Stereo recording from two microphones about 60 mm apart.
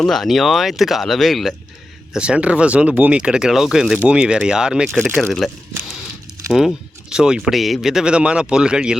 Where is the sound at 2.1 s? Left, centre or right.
Centre.